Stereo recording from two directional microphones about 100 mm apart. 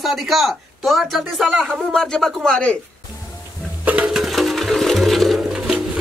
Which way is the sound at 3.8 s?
15° right (ahead or behind).